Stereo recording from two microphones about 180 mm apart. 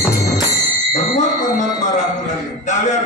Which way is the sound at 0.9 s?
45° left (ahead or behind).